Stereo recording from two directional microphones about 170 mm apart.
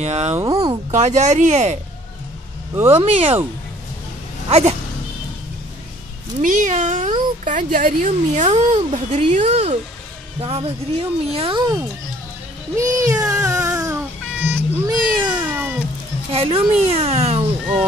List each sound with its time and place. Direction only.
0.0 s speech: 40° right (ahead or behind)
0.4 s speech: 20° right (ahead or behind)
0.9 s speech: 40° right (ahead or behind)
2.9 s speech: 35° right (ahead or behind)
4.5 s speech: 40° right (ahead or behind)
6.4 s speech: 50° right (ahead or behind); by 11.6 s 35° right (ahead or behind)
12.7 s speech: 20° right (ahead or behind)
13.5 s a sound: 20° right (ahead or behind)
14.9 s cat: 25° right (ahead or behind)
15.4 s cat: 10° right (ahead or behind)
16.3 s speech: 35° right (ahead or behind)